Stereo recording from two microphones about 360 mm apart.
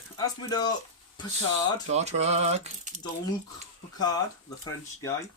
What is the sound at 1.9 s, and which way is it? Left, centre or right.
Speech, centre.